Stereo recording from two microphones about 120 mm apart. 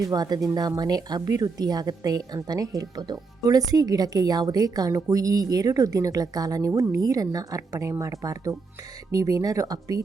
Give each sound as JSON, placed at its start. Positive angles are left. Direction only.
{"t": 0.0, "sound": "speech", "side_deg": -35}